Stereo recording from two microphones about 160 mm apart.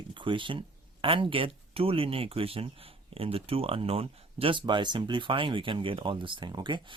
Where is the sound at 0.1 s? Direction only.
30° right (ahead or behind).